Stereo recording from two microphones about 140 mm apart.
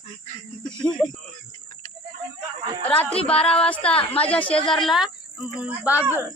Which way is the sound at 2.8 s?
10° left (ahead or behind).